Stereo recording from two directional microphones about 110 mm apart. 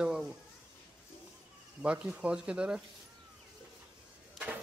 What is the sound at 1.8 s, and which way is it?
Speech, 10° right (ahead or behind).